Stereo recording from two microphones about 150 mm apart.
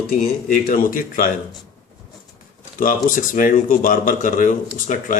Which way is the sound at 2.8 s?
65° left (ahead or behind).